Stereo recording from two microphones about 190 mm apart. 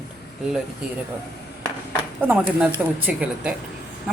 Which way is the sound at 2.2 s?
10° right (ahead or behind).